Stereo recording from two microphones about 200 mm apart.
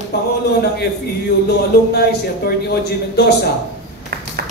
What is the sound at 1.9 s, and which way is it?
A man's voice, 55° left (ahead or behind).